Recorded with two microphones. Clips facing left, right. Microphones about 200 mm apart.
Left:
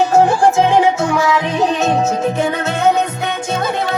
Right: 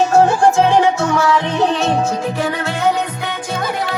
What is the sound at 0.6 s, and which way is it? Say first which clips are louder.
Music: even; 15° left (ahead or behind).